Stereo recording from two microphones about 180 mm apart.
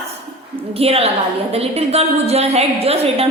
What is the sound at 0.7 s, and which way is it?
A woman's voice, 35° right (ahead or behind).